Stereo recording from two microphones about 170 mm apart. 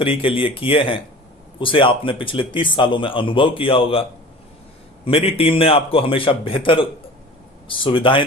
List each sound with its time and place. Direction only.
0.0 s speech: 30° left (ahead or behind)
5.0 s speech: 35° left (ahead or behind)